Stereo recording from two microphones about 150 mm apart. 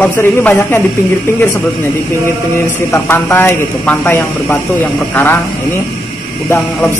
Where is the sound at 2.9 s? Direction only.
15° left (ahead or behind).